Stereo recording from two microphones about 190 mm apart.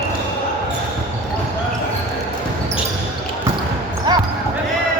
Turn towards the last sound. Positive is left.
turn(degrees=-25)  # may be behind; listen again after turning